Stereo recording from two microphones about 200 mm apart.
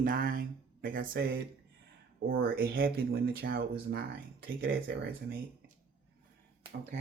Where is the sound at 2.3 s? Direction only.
50° right (ahead or behind).